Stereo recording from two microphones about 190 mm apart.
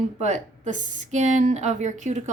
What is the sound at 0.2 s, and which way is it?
A woman's voice, 40° right (ahead or behind).